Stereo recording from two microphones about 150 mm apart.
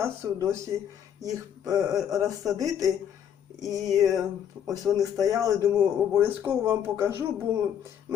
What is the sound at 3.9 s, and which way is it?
Speech, 25° right (ahead or behind).